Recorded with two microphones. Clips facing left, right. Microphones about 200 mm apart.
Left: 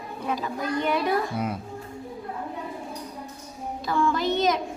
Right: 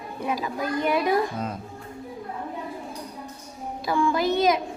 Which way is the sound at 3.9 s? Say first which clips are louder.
Right 1 dB; 10° right (ahead or behind).